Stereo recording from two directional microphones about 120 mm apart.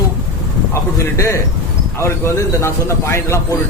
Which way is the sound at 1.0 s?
25° left (ahead or behind).